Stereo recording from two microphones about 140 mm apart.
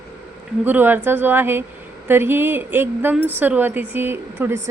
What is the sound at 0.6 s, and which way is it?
Speech, 15° right (ahead or behind).